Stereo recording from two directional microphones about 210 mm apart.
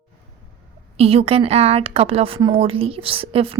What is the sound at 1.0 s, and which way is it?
A woman's voice, 30° right (ahead or behind).